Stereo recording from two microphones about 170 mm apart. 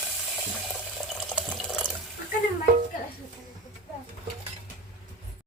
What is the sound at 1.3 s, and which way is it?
Water, 5° left (ahead or behind).